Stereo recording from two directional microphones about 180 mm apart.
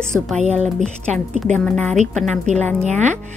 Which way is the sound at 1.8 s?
40° right (ahead or behind).